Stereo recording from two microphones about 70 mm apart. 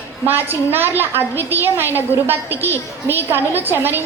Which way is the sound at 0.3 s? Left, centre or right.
Right.